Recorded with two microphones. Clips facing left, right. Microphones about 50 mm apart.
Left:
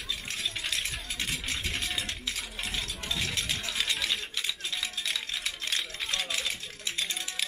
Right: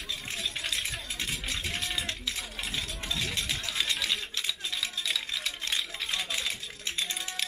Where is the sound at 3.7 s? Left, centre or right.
Centre.